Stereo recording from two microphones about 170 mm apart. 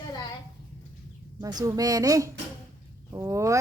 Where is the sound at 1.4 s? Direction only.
20° right (ahead or behind).